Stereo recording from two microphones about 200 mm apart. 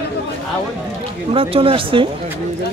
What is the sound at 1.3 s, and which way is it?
Speech, 30° right (ahead or behind).